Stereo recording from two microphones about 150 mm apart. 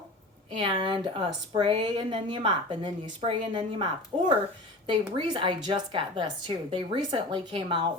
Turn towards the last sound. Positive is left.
turn(degrees=-35)  # may be behind; listen again after turning